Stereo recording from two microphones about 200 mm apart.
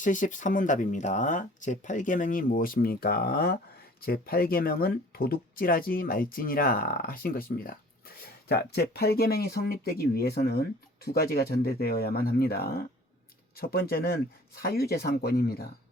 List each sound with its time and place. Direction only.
0.0 s speech: 40° left (ahead or behind)